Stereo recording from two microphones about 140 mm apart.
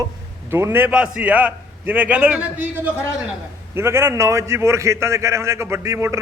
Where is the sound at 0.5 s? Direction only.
15° right (ahead or behind).